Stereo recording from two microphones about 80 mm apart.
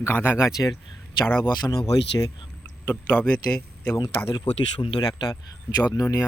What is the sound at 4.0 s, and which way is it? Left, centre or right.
Speech, left.